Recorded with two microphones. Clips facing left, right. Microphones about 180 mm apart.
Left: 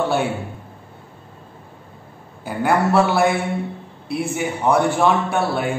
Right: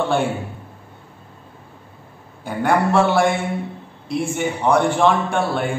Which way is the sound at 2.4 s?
5° left (ahead or behind).